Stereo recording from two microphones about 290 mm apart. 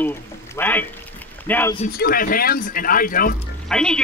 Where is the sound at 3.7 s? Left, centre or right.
Centre.